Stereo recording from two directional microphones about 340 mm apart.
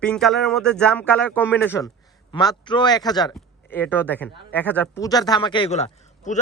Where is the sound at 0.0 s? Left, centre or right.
Centre.